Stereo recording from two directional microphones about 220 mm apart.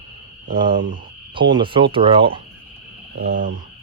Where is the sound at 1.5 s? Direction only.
20° right (ahead or behind).